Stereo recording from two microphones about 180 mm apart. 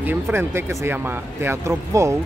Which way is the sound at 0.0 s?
10° right (ahead or behind).